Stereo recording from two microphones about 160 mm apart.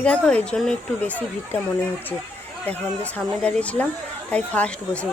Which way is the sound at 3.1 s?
5° left (ahead or behind).